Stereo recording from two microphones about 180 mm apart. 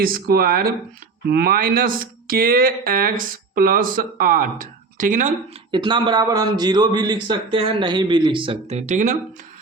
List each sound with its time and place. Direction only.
0.0 s speech: 55° right (ahead or behind)
5.7 s a man's voice: 25° right (ahead or behind)
8.9 s speech: 45° right (ahead or behind)